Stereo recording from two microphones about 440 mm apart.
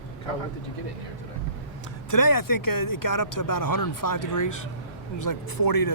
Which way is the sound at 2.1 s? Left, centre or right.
Left.